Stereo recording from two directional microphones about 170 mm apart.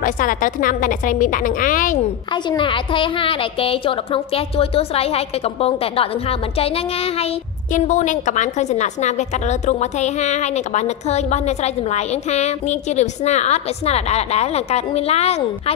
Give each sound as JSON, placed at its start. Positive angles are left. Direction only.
{"t": 0.0, "sound": "a woman's voice", "side_deg": 50}
{"t": 2.3, "sound": "a woman's voice", "side_deg": 30}